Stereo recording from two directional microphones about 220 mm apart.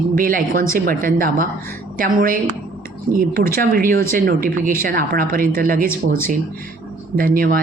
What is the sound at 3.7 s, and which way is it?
Speech, 40° right (ahead or behind).